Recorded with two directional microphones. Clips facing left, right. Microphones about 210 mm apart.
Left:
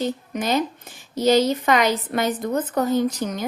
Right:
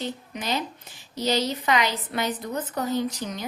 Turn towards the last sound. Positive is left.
turn(degrees=50)  # may be behind; listen again after turning